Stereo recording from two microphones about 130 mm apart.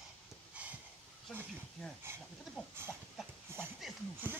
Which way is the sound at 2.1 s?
20° right (ahead or behind).